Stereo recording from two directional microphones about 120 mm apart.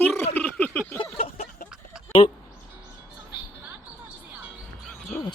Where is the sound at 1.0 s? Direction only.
55° left (ahead or behind).